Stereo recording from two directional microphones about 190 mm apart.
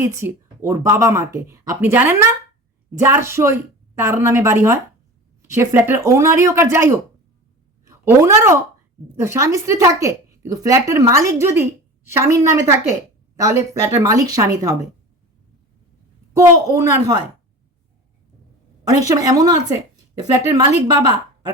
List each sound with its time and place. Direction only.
0.0 s a woman's voice: 15° right (ahead or behind)
16.3 s speech: 15° right (ahead or behind)
18.9 s a woman's voice: 20° right (ahead or behind)
20.8 s a woman's voice: 20° right (ahead or behind)